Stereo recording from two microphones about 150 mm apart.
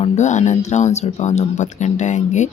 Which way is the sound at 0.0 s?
50° left (ahead or behind).